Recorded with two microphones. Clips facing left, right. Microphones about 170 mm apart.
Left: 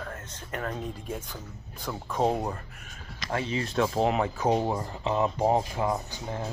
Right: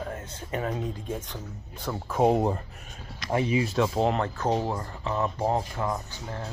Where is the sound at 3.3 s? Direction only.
15° right (ahead or behind); by 6.5 s 15° left (ahead or behind).